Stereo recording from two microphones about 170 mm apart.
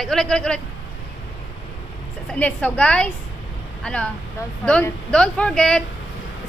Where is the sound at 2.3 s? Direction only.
5° left (ahead or behind).